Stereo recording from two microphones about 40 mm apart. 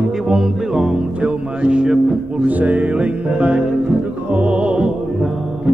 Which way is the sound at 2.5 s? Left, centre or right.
Right.